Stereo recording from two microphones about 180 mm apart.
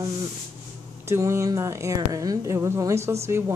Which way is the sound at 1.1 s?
15° right (ahead or behind).